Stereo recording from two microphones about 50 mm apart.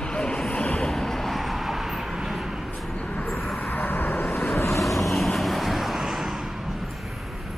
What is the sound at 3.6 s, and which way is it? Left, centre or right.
Vehicle, left.